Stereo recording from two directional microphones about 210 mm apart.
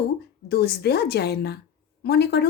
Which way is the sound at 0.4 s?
50° left (ahead or behind).